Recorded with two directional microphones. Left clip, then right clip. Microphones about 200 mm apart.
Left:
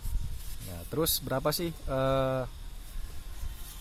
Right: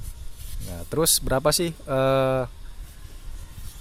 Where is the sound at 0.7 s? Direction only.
35° right (ahead or behind).